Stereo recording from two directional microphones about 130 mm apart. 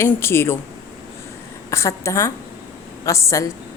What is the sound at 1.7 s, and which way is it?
A woman's voice, 20° left (ahead or behind).